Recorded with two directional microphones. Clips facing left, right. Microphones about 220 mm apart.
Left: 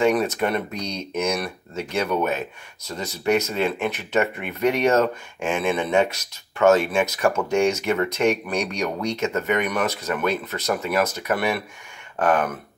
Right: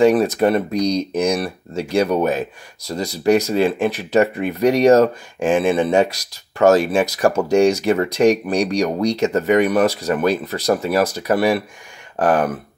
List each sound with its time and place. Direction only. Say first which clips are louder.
0.0 s speech: right 6 dB; 35° right (ahead or behind)